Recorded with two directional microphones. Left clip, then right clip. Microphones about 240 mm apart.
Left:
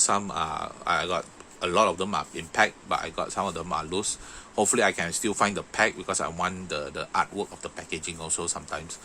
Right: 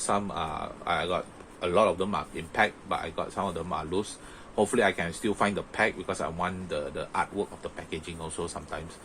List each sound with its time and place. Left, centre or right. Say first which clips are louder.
0.0 s speech: left 3 dB; left